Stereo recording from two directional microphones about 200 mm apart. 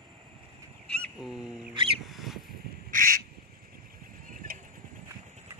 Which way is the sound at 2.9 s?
45° right (ahead or behind).